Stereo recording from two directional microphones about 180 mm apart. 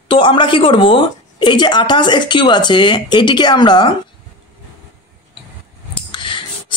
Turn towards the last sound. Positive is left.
turn(degrees=25)  # may be behind; listen again after turning